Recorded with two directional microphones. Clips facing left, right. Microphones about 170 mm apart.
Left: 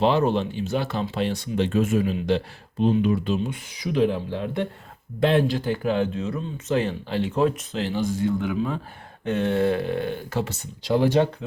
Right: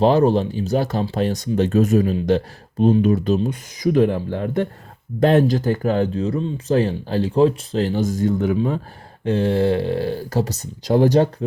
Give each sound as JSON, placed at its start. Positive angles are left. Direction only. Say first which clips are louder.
{"t": 0.0, "sound": "speech", "louder": "right 5 dB", "side_deg": -40}
{"t": 9.2, "sound": "speech", "louder": "right 4 dB", "side_deg": -30}